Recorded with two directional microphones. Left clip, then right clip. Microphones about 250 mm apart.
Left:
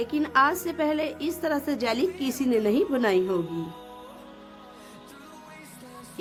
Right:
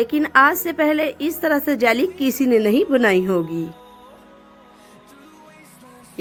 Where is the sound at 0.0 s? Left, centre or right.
Right.